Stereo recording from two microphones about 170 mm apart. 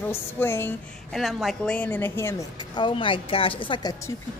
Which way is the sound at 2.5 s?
25° left (ahead or behind).